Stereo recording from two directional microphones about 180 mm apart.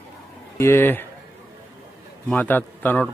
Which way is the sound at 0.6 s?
15° left (ahead or behind).